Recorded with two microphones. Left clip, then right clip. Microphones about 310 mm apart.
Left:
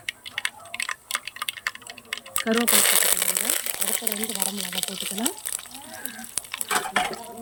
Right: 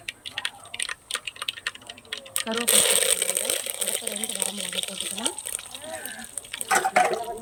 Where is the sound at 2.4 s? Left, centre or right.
Left.